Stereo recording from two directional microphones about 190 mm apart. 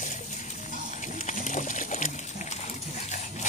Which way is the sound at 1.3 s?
40° left (ahead or behind).